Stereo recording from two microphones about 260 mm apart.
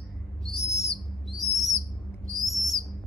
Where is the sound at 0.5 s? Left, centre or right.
Centre.